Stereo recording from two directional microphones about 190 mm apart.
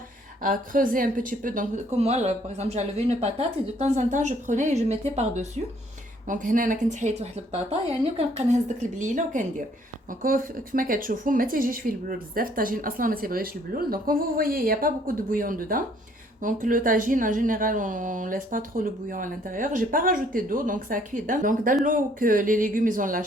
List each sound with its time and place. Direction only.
0.4 s speech: 45° right (ahead or behind)